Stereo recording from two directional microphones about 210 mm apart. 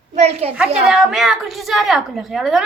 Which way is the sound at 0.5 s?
5° right (ahead or behind).